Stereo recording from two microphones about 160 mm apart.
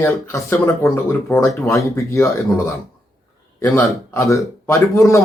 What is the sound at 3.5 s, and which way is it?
Speech, 15° left (ahead or behind).